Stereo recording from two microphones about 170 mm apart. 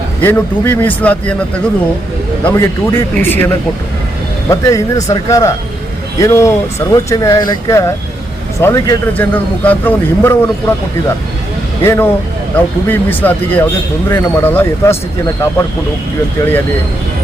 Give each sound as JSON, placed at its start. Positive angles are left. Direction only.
{"t": 0.2, "sound": "a man's voice", "side_deg": 10}
{"t": 2.4, "sound": "a man's voice", "side_deg": 15}
{"t": 11.8, "sound": "a man's voice", "side_deg": 15}